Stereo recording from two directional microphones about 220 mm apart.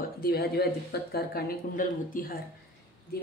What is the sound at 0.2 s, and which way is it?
Speech, 45° left (ahead or behind).